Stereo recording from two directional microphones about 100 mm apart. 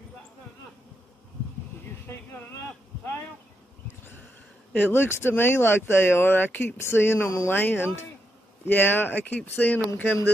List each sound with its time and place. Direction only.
4.7 s speech: 20° left (ahead or behind)